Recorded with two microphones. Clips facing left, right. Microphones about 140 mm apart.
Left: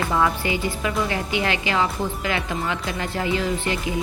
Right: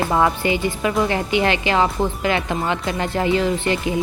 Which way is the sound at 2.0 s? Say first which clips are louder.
Right 5 dB; 65° right (ahead or behind).